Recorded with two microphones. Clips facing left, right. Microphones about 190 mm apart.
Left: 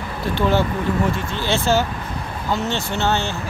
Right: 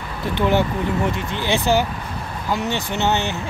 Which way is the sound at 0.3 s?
15° right (ahead or behind).